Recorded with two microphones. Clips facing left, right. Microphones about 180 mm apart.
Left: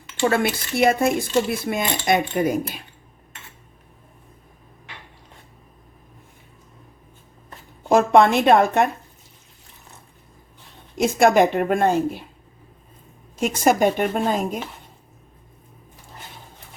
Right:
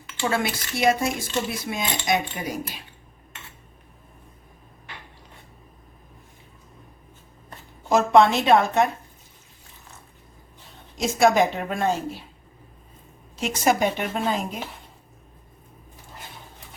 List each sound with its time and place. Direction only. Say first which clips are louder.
0.3 s speech: left 4 dB; 55° left (ahead or behind)
7.9 s a woman's voice: left 2 dB; 55° left (ahead or behind)
10.9 s speech: left 3 dB; 55° left (ahead or behind)
13.3 s a woman's voice: left 3 dB; 50° left (ahead or behind)